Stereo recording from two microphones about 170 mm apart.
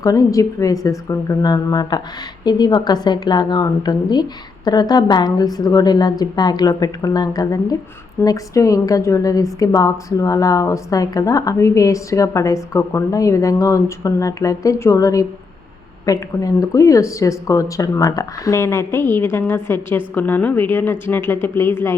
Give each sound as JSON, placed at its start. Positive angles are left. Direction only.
{"t": 0.0, "sound": "a woman's voice", "side_deg": 20}